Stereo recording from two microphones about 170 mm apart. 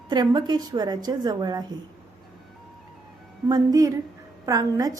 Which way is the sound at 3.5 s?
20° right (ahead or behind).